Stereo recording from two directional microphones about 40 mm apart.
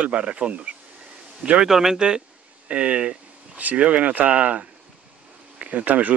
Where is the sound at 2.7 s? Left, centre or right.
Right.